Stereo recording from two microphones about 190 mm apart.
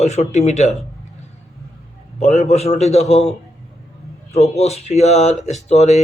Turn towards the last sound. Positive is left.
turn(degrees=35)  # may be behind; listen again after turning